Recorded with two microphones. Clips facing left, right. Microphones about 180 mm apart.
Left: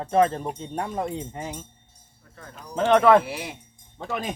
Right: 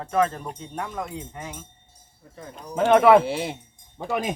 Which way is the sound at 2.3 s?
15° right (ahead or behind).